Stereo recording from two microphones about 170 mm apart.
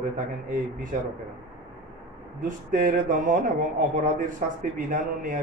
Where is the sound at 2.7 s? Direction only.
55° right (ahead or behind).